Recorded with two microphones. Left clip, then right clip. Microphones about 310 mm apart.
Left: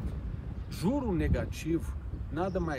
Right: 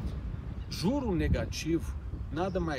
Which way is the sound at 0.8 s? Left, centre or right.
Centre.